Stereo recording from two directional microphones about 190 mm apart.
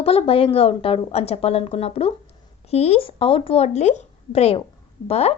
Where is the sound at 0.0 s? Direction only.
30° left (ahead or behind).